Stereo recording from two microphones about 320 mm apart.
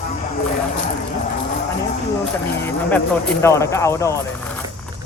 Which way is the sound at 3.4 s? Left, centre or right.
Centre.